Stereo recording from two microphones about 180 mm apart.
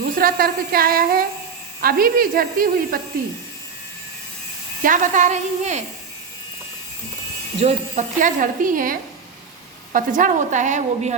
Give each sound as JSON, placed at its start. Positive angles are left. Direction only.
{"t": 0.0, "sound": "a woman's voice", "side_deg": -55}
{"t": 4.8, "sound": "speech", "side_deg": -45}
{"t": 7.6, "sound": "speech", "side_deg": -45}